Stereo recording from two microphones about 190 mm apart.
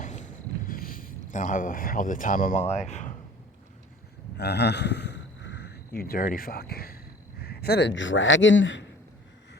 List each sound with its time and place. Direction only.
0.0 s a sound: 40° left (ahead or behind)
0.7 s speech: 50° left (ahead or behind)
4.4 s a man's voice: 60° left (ahead or behind); by 8.9 s 80° left